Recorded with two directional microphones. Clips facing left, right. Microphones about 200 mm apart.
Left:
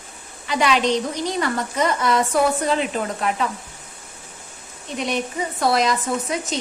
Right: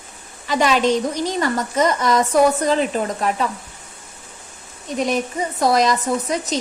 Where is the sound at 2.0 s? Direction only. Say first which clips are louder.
Right 2 dB; 40° right (ahead or behind).